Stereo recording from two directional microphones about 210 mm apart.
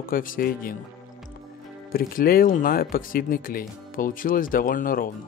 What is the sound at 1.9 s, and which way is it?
Speech, 45° left (ahead or behind).